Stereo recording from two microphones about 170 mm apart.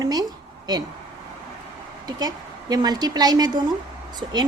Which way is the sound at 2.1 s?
25° right (ahead or behind).